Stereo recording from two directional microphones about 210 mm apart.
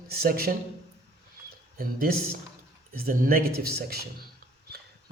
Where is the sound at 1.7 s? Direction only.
45° right (ahead or behind).